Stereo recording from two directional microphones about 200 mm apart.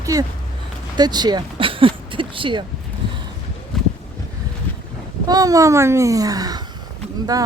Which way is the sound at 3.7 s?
Centre (ahead or behind).